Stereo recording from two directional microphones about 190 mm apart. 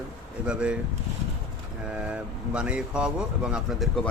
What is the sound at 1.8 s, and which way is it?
Speech, 5° right (ahead or behind).